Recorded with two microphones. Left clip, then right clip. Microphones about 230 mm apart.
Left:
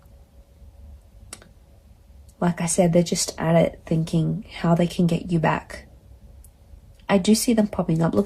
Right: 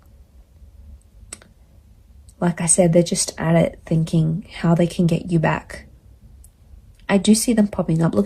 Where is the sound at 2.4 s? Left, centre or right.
Right.